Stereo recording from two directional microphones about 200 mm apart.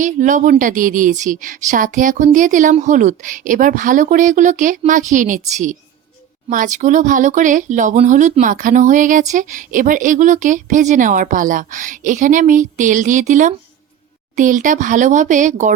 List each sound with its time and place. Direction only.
0.0 s speech: 40° right (ahead or behind)